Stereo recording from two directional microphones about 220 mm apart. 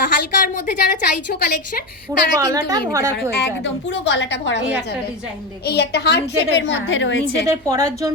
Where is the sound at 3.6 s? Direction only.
55° left (ahead or behind).